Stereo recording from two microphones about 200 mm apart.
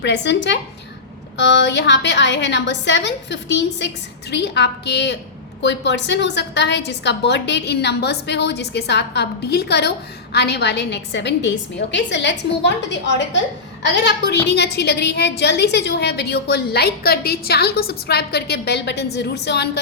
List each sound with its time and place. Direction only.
0.0 s a woman's voice: 60° left (ahead or behind)